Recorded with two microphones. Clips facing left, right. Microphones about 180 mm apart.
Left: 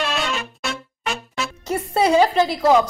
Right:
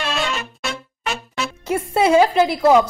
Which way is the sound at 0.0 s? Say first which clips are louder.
Even; centre (ahead or behind).